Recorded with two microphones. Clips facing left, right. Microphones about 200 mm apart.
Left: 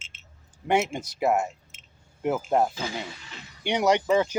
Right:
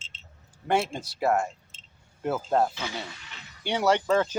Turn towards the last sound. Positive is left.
turn(degrees=15)  # may be behind; listen again after turning